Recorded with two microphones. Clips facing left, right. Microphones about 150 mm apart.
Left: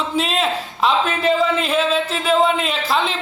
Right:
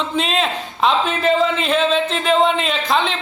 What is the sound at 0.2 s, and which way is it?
A man's voice, centre (ahead or behind).